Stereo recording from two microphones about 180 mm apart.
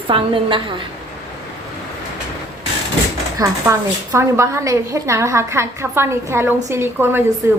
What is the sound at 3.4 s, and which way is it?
A woman's voice, 15° right (ahead or behind).